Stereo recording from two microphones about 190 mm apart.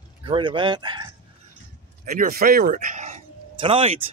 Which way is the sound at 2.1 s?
50° right (ahead or behind).